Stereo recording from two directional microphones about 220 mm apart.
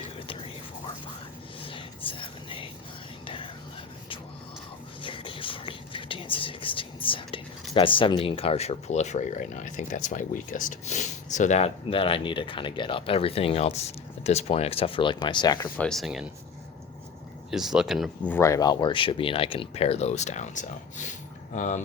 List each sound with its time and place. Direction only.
1.6 s whispering: 25° left (ahead or behind)
5.0 s speech: 25° left (ahead or behind)
15.8 s speech: centre (ahead or behind)
17.5 s speech: centre (ahead or behind); by 21.8 s 35° left (ahead or behind)